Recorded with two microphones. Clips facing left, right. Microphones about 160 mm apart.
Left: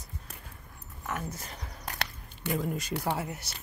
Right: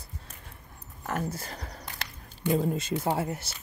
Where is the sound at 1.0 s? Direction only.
35° right (ahead or behind).